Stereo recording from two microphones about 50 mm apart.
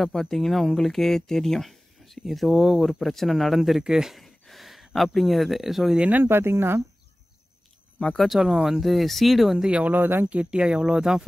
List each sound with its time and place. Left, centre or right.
0.0 s speech: centre
4.2 s speech: centre
6.2 s speech: right
8.2 s speech: centre
9.7 s speech: right
9.9 s speech: right
10.3 s speech: right